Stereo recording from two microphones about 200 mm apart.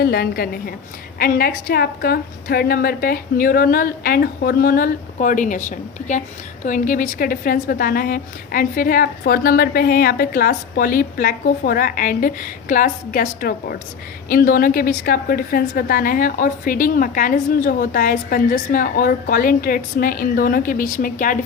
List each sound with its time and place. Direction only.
0.0 s a woman's voice: 50° left (ahead or behind)